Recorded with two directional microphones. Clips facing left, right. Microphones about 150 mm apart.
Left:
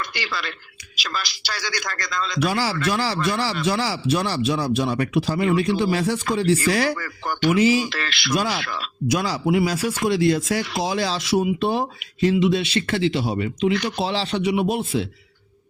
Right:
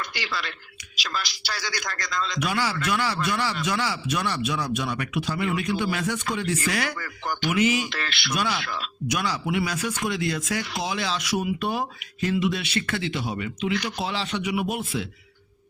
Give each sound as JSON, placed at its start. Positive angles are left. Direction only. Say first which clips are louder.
{"t": 0.0, "sound": "a man's voice", "louder": "left 3 dB", "side_deg": 85}
{"t": 2.4, "sound": "a man's voice", "louder": "left 6 dB", "side_deg": 35}
{"t": 6.9, "sound": "speech", "louder": "left 3 dB", "side_deg": 60}
{"t": 7.5, "sound": "a man's voice", "louder": "left 4 dB", "side_deg": 30}
{"t": 7.9, "sound": "speech", "louder": "left 3 dB", "side_deg": 90}
{"t": 8.3, "sound": "a man's voice", "louder": "left 4 dB", "side_deg": 30}
{"t": 8.6, "sound": "a man's voice", "louder": "left 2 dB", "side_deg": 65}
{"t": 9.0, "sound": "speech", "louder": "left 6 dB", "side_deg": 30}